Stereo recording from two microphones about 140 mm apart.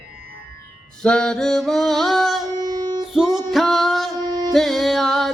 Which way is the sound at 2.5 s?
30° right (ahead or behind).